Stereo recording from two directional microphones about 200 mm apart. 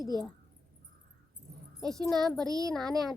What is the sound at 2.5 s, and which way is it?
Speech, 20° right (ahead or behind).